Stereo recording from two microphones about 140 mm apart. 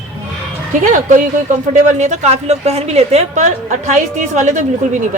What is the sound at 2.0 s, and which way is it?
A woman's voice, 55° right (ahead or behind).